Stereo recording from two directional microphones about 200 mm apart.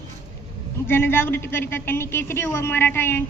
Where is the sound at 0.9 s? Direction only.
10° left (ahead or behind).